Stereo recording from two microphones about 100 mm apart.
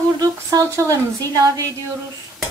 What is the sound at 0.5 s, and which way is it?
A woman's voice, 35° right (ahead or behind).